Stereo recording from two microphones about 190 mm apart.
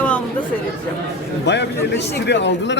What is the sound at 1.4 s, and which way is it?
A man's voice, 65° left (ahead or behind).